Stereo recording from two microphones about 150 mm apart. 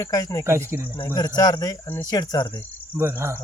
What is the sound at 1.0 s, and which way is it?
Speech, 25° left (ahead or behind).